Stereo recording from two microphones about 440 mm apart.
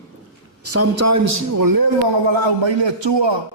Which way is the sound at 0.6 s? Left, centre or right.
Right.